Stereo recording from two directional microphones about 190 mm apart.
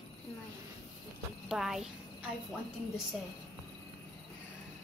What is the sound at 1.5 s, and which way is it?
Speech, centre (ahead or behind).